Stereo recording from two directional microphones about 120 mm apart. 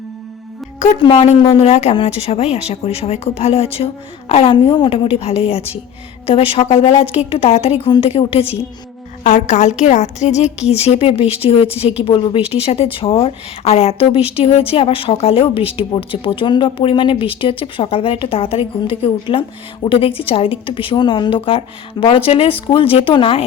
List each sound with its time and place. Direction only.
1.0 s a woman's voice: 55° left (ahead or behind)
7.9 s a woman's voice: 40° left (ahead or behind)
8.1 s a woman's voice: 55° left (ahead or behind)
9.2 s a woman's voice: 90° left; by 21.6 s 50° left (ahead or behind)
22.0 s a woman's voice: 35° left (ahead or behind)
22.3 s a woman's voice: 50° left (ahead or behind)